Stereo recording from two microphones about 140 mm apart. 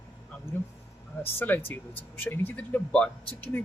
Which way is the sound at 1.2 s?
15° left (ahead or behind).